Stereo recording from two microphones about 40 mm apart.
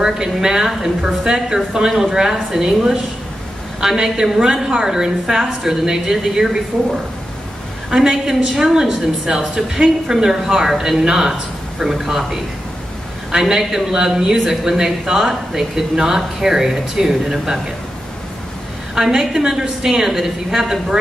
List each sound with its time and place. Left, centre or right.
0.0 s speech: centre
3.8 s speech: centre
7.9 s speech: centre
13.3 s speech: centre
18.9 s speech: centre